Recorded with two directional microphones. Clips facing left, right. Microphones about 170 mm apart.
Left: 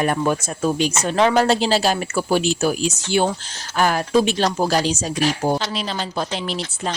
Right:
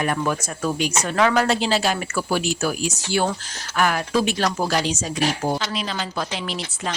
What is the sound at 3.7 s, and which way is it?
A woman's voice, 30° left (ahead or behind).